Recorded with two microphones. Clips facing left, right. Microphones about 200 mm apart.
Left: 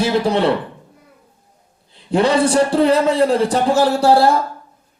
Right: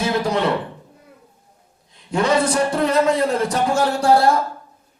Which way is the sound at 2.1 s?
30° left (ahead or behind).